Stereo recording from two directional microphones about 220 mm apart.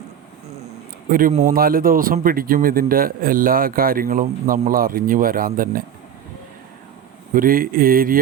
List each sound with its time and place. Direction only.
1.1 s a man's voice: 35° right (ahead or behind)
7.3 s a man's voice: 40° right (ahead or behind)